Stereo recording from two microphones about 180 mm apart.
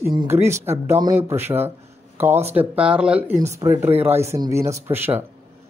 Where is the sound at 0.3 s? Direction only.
15° right (ahead or behind).